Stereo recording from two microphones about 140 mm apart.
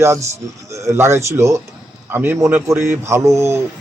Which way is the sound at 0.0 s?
20° right (ahead or behind).